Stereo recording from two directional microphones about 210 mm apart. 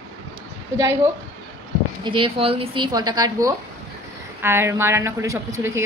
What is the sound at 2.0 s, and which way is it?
A woman's voice, 25° right (ahead or behind).